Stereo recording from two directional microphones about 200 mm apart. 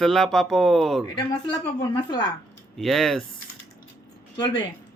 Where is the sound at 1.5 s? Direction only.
20° left (ahead or behind).